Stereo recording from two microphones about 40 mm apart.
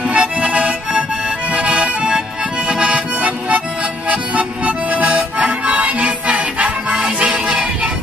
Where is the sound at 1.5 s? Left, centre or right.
Right.